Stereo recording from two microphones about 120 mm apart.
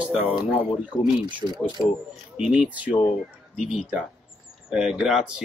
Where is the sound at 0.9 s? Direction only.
30° left (ahead or behind).